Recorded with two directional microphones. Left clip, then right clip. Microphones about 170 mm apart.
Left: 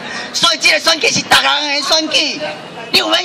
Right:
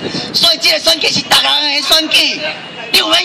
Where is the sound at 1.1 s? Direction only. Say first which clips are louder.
Right 1 dB; 25° right (ahead or behind).